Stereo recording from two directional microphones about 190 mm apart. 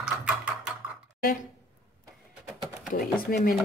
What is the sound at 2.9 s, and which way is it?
Speech, 45° left (ahead or behind).